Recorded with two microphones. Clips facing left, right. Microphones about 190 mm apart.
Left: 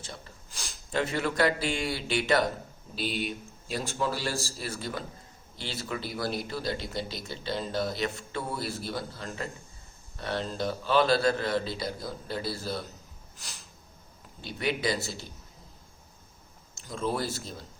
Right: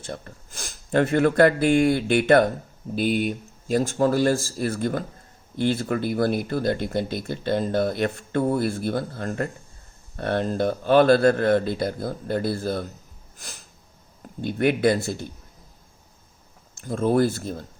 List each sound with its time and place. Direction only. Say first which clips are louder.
0.0 s speech: right 9 dB; 55° right (ahead or behind)
13.3 s a sound: right 5 dB; 50° right (ahead or behind)
14.4 s speech: right 10 dB; 55° right (ahead or behind)
16.7 s speech: right 10 dB; 55° right (ahead or behind)